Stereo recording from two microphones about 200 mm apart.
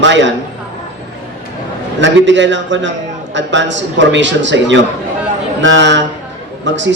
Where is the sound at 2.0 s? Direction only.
65° right (ahead or behind).